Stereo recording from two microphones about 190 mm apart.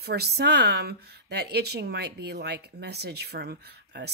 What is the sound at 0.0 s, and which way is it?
Speech, 55° right (ahead or behind).